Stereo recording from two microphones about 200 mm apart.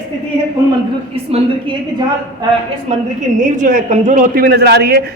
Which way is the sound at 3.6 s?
40° right (ahead or behind).